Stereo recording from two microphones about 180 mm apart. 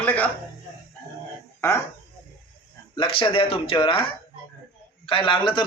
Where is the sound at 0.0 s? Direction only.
10° left (ahead or behind).